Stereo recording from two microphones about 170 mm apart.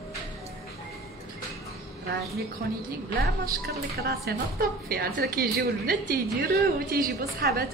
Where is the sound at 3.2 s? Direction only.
65° right (ahead or behind).